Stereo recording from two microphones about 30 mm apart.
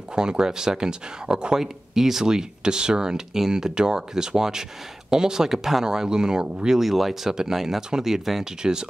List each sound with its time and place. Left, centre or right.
0.1 s speech: right
2.2 s speech: right
6.8 s speech: centre
7.3 s speech: centre